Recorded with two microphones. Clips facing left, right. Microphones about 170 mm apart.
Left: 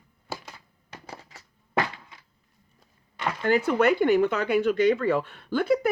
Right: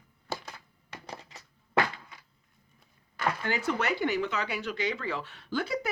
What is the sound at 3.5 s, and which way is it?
Speech, 55° left (ahead or behind).